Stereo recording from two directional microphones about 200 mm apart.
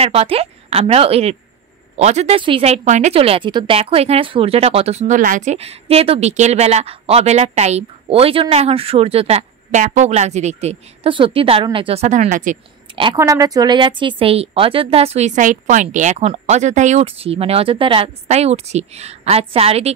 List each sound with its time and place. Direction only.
0.0 s a woman's voice: 30° right (ahead or behind)
12.9 s a woman's voice: 25° right (ahead or behind)